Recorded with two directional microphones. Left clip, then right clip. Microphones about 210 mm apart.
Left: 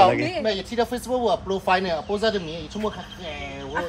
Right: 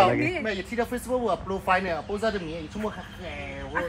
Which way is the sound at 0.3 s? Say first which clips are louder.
Left 4 dB; 60° left (ahead or behind).